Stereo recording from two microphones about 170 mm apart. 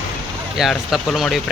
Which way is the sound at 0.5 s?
Centre (ahead or behind).